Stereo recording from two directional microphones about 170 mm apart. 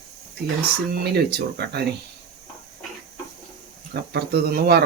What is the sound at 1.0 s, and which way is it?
Speech, 75° right (ahead or behind).